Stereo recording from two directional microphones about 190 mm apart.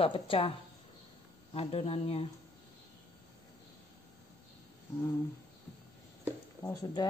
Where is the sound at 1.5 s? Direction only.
30° left (ahead or behind).